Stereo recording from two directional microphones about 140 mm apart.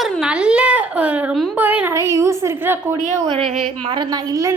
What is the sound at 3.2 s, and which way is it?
Speech, 45° right (ahead or behind).